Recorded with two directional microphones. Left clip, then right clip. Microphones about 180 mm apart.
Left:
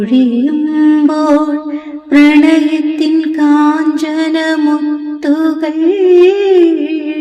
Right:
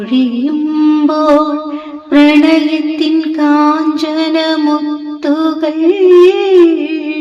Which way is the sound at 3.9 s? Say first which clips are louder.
Right 1 dB; 45° left (ahead or behind).